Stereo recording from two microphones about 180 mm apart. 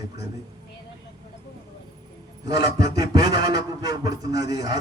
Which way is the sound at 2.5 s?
20° right (ahead or behind).